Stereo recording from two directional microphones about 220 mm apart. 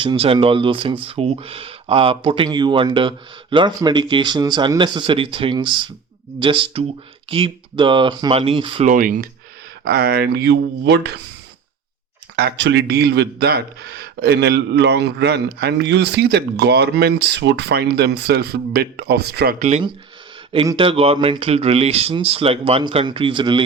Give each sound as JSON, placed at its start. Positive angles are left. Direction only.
{"t": 0.0, "sound": "speech", "side_deg": -25}
{"t": 8.9, "sound": "a man's voice", "side_deg": -40}
{"t": 12.4, "sound": "a man's voice", "side_deg": -50}
{"t": 19.5, "sound": "speech", "side_deg": -30}